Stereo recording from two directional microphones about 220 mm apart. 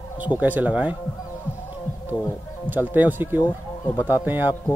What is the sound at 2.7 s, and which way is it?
Speech, 10° right (ahead or behind).